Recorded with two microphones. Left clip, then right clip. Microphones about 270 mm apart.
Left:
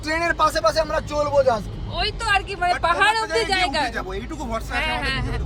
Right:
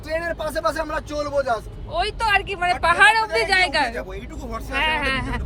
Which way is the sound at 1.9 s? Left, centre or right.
Right.